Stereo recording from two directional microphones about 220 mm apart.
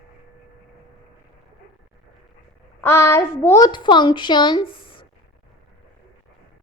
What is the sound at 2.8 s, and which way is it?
A child's voice, 10° left (ahead or behind).